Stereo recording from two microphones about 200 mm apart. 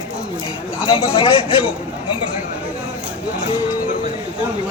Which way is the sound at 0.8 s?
25° left (ahead or behind).